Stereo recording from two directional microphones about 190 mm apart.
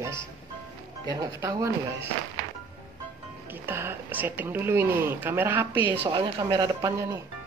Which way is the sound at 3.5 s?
10° right (ahead or behind).